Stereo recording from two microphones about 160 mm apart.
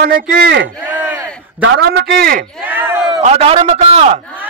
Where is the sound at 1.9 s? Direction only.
70° right (ahead or behind).